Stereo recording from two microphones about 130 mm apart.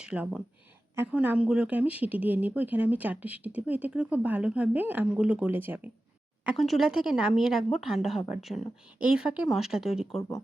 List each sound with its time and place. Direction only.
0.0 s speech: 10° right (ahead or behind)
10.2 s speech: 20° left (ahead or behind)